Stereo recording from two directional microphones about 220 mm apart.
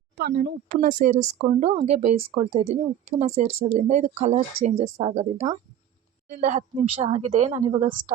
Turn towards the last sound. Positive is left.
turn(degrees=-30)  # may be behind; listen again after turning